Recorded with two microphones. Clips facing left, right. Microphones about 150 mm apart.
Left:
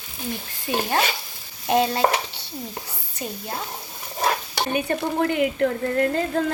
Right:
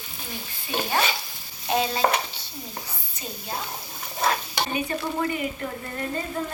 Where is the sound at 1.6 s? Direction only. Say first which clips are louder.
Left 4 dB; 55° left (ahead or behind).